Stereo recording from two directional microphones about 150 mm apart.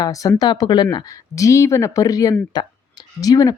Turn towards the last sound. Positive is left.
turn(degrees=25)  # may be behind; listen again after turning